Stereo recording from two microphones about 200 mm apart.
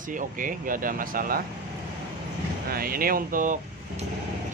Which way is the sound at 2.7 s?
45° right (ahead or behind).